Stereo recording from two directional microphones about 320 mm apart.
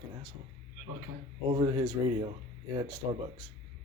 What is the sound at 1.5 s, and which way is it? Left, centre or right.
A man's voice, centre.